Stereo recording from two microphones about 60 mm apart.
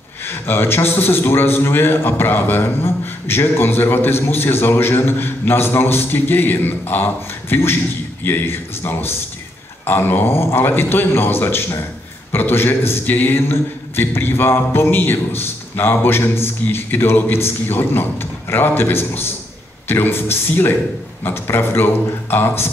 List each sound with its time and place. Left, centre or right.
0.2 s a man's voice: left